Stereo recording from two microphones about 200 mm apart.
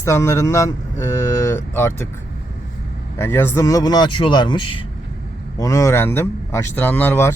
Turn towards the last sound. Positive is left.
turn(degrees=10)  # may be behind; listen again after turning